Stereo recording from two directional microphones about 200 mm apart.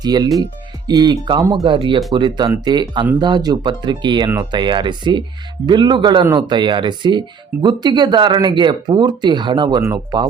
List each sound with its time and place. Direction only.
0.0 s speech: 20° right (ahead or behind)